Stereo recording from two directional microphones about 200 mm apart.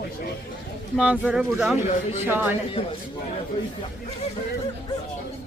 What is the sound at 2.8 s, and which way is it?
Speech, 30° left (ahead or behind).